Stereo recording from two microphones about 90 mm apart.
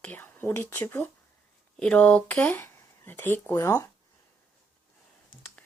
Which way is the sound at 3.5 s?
35° left (ahead or behind).